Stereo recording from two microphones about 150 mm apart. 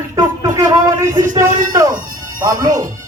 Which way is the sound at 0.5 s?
20° right (ahead or behind).